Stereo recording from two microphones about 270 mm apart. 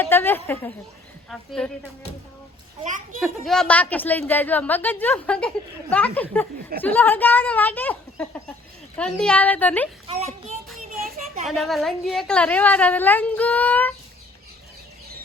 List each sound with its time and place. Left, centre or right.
0.0 s a woman's voice: centre
2.8 s a child's voice: right
3.2 s a woman's voice: centre
11.4 s a woman's voice: centre